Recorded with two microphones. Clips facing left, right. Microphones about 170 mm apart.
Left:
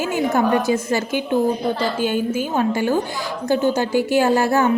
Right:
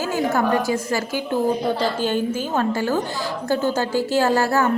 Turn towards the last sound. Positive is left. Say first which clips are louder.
# left 2 dB
turn(degrees=20)  # may be behind; listen again after turning